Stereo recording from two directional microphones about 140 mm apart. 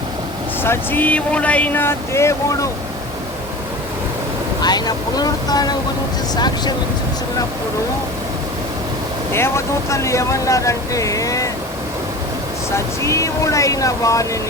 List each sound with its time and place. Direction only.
0.6 s speech: 15° left (ahead or behind)
4.6 s speech: 30° left (ahead or behind)
9.3 s speech: 20° left (ahead or behind)
12.7 s speech: 20° left (ahead or behind)